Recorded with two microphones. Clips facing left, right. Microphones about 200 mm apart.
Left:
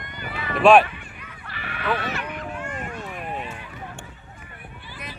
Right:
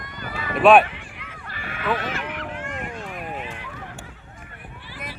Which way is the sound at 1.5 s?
45° right (ahead or behind).